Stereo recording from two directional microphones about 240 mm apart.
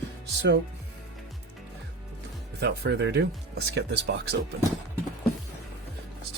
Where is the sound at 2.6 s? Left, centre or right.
Right.